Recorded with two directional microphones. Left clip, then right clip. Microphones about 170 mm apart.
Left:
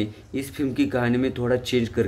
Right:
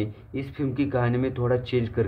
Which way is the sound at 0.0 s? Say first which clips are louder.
Left 3 dB; 15° left (ahead or behind).